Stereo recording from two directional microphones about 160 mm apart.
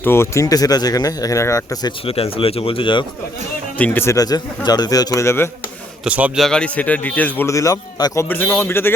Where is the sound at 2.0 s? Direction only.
40° left (ahead or behind).